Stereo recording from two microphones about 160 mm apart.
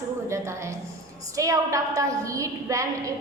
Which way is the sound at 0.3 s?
15° right (ahead or behind).